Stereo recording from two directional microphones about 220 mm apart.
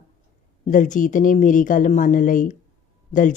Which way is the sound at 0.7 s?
35° left (ahead or behind).